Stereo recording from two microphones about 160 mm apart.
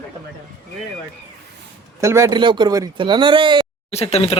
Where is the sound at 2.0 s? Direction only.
20° right (ahead or behind).